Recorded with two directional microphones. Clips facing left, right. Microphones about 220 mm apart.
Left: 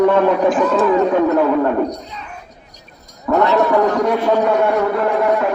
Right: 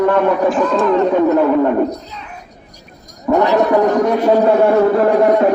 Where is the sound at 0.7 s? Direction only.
5° left (ahead or behind).